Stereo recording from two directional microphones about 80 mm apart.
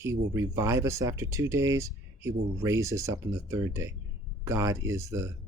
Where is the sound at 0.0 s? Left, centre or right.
Right.